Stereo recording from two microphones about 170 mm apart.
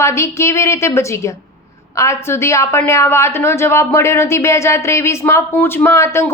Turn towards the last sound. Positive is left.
turn(degrees=15)  # may be behind; listen again after turning